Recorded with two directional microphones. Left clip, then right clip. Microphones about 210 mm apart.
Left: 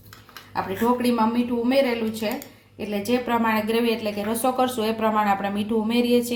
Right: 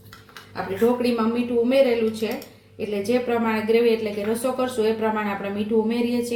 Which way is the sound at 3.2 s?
55° left (ahead or behind).